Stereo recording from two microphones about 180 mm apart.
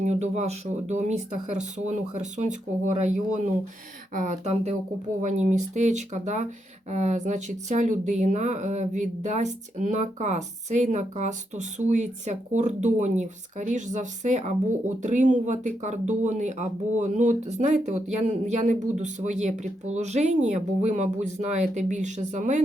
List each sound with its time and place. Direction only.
0.0 s speech: 40° right (ahead or behind)
4.1 s speech: 45° right (ahead or behind)